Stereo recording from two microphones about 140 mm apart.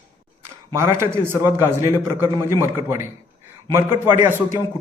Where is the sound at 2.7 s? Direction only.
15° right (ahead or behind).